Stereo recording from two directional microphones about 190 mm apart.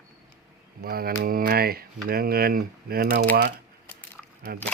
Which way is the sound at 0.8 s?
50° right (ahead or behind).